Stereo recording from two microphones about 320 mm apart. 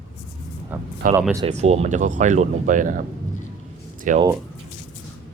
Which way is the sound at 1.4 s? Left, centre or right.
Centre.